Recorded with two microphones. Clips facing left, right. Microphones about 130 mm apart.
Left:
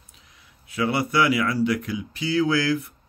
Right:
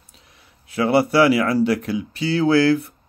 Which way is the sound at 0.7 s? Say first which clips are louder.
Right 6 dB; 35° right (ahead or behind).